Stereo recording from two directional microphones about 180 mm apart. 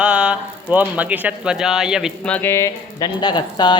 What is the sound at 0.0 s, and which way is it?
Speech, 5° right (ahead or behind).